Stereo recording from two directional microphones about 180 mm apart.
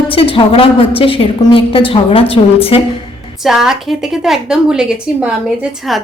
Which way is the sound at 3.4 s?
Centre (ahead or behind).